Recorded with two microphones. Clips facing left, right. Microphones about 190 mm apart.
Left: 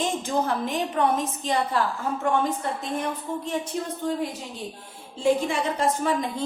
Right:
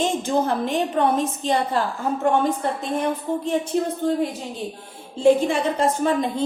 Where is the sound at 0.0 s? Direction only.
25° right (ahead or behind).